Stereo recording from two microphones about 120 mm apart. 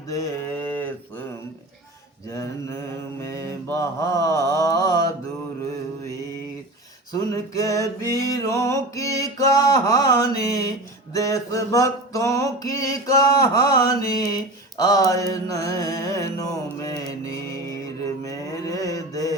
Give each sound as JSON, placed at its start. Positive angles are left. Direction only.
{"t": 0.1, "sound": "a sound", "side_deg": 25}
{"t": 2.3, "sound": "music", "side_deg": 25}
{"t": 3.2, "sound": "mantra", "side_deg": 20}
{"t": 7.1, "sound": "music", "side_deg": 30}
{"t": 18.3, "sound": "mantra", "side_deg": 30}